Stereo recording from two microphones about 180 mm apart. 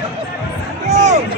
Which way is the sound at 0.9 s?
40° right (ahead or behind).